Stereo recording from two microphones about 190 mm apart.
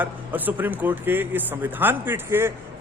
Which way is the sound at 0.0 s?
10° right (ahead or behind).